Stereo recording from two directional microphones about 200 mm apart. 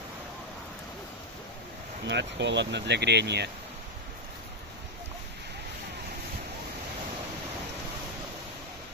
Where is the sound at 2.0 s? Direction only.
60° right (ahead or behind).